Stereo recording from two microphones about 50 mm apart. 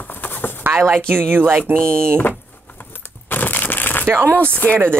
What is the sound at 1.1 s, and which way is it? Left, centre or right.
Speech, right.